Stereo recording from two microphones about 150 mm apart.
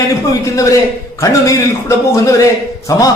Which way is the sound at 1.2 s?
20° left (ahead or behind).